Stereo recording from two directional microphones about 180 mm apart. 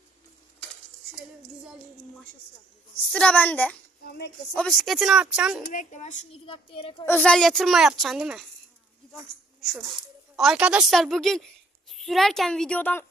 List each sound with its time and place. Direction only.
3.1 s a woman's voice: 5° left (ahead or behind)
5.6 s speech: 45° left (ahead or behind); by 6.9 s 30° left (ahead or behind)
7.0 s a woman's voice: 10° left (ahead or behind)
9.6 s a woman's voice: centre (ahead or behind)